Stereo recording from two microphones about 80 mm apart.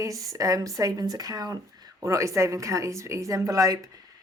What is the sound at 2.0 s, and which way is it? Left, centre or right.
Speech, right.